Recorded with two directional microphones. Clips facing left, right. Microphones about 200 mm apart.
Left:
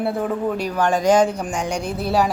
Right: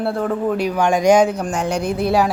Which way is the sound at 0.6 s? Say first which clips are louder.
Right 4 dB; 10° right (ahead or behind).